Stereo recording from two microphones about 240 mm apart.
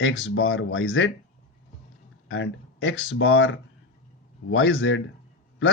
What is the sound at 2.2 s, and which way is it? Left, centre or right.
A man's voice, left.